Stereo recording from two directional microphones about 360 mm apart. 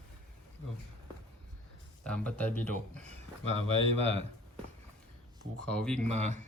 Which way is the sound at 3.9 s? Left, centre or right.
Centre.